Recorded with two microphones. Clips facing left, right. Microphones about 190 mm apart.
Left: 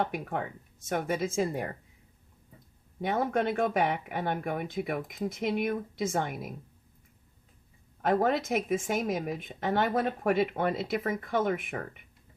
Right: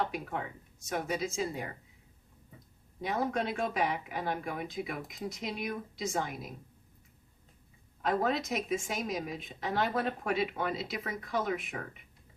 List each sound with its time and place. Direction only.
0.0 s a woman's voice: 55° left (ahead or behind)
3.0 s a woman's voice: 55° left (ahead or behind)
8.0 s a woman's voice: 50° left (ahead or behind)